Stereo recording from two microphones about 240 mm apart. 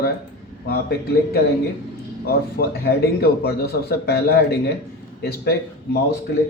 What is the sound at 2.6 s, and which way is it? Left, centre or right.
Speech, left.